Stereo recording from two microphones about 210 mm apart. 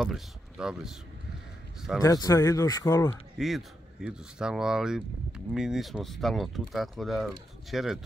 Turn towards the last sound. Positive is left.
turn(degrees=0)  # may be behind; listen again after turning